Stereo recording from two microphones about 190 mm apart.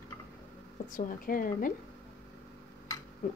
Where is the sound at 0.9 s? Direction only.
45° left (ahead or behind).